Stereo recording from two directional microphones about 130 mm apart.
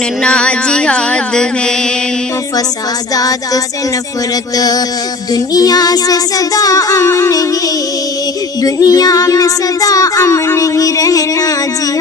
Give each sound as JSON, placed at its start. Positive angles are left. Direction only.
{"t": 0.2, "sound": "music", "side_deg": 10}
{"t": 3.2, "sound": "child singing", "side_deg": 30}
{"t": 8.6, "sound": "child singing", "side_deg": 30}